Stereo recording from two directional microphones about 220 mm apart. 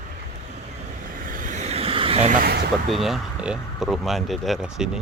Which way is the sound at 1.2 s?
35° right (ahead or behind).